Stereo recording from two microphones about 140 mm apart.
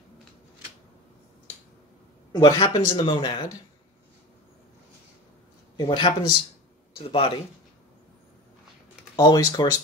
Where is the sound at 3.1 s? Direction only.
35° left (ahead or behind).